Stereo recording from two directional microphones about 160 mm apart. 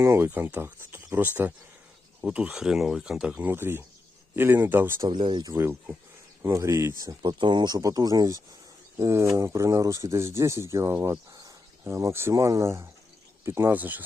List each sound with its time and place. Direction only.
0.0 s speech: 15° right (ahead or behind)
5.0 s speech: 30° right (ahead or behind); by 14.0 s 10° right (ahead or behind)